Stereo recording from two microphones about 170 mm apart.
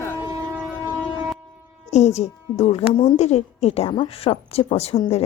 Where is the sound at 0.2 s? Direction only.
15° right (ahead or behind).